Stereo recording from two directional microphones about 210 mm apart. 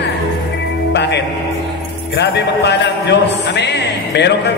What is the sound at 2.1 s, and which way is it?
A man's voice, 50° left (ahead or behind).